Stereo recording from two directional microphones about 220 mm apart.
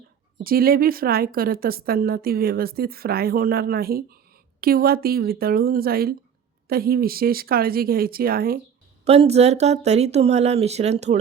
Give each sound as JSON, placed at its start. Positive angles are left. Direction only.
{"t": 0.4, "sound": "a woman's voice", "side_deg": -40}
{"t": 9.0, "sound": "speech", "side_deg": -30}